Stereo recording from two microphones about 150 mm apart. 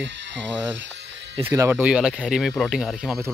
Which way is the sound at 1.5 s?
20° right (ahead or behind).